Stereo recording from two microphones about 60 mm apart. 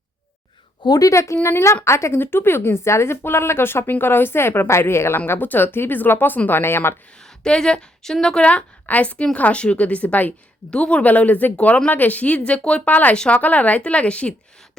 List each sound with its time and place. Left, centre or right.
0.9 s a woman's voice: left
1.1 s a woman's voice: left
2.2 s speech: left
7.1 s a woman's voice: centre